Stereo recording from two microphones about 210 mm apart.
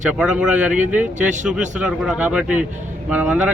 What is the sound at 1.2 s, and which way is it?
Speech, 35° right (ahead or behind).